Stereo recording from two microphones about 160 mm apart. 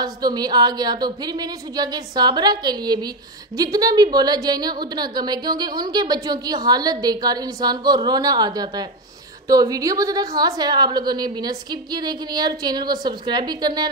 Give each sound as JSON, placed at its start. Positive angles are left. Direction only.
{"t": 0.0, "sound": "a woman's voice", "side_deg": -25}